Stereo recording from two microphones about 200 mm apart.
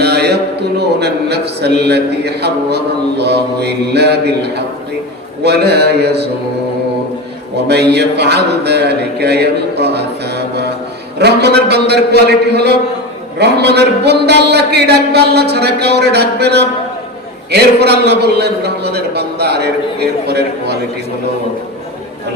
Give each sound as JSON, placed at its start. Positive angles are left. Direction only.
{"t": 0.0, "sound": "a sound", "side_deg": -55}
{"t": 0.8, "sound": "a man's voice", "side_deg": -55}
{"t": 7.7, "sound": "a man's voice", "side_deg": -55}